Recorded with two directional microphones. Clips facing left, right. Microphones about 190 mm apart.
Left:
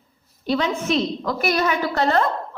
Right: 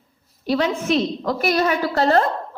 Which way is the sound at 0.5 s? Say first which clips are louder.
Right 2 dB; 40° right (ahead or behind).